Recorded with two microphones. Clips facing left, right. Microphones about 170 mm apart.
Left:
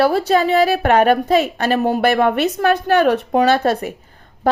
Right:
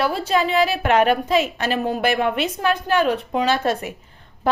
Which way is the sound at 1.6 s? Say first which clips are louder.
Left 5 dB; 50° left (ahead or behind).